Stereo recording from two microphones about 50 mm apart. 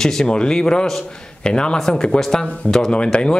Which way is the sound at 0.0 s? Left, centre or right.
Centre.